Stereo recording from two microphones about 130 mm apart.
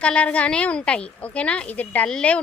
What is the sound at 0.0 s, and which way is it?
A woman's voice, 10° left (ahead or behind).